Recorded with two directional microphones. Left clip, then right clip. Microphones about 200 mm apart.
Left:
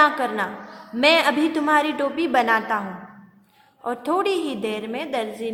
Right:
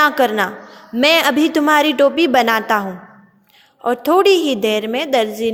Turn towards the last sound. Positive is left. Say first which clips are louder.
# right 10 dB
turn(degrees=-35)  # may be behind; listen again after turning